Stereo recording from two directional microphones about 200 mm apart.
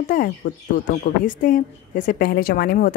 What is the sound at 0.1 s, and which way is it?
A woman's voice, 40° left (ahead or behind).